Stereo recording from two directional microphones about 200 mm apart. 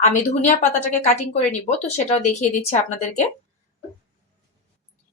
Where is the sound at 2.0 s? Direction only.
35° left (ahead or behind).